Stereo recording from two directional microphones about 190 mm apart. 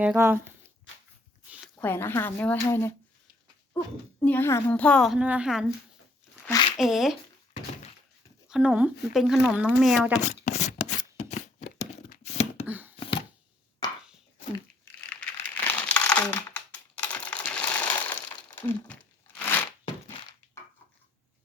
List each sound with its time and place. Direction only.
0.0 s speech: 10° right (ahead or behind)
1.8 s speech: 10° left (ahead or behind)
4.2 s a woman's voice: 10° left (ahead or behind)
6.7 s a woman's voice: centre (ahead or behind)
8.4 s a woman's voice: 5° right (ahead or behind)
10.2 s shuffling cards: 35° left (ahead or behind)
12.3 s a sound: 35° left (ahead or behind)
12.6 s a sound: 10° right (ahead or behind)
13.8 s chopping: 20° left (ahead or behind)
15.1 s crumpling: 5° left (ahead or behind)
16.0 s a sound: 5° left (ahead or behind)
18.6 s crumpling: 10° left (ahead or behind)